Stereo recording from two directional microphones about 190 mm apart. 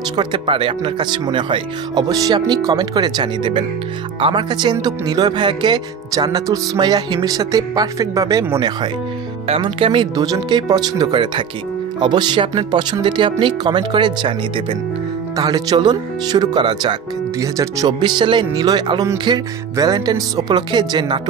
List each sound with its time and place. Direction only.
0.1 s speech: 25° right (ahead or behind)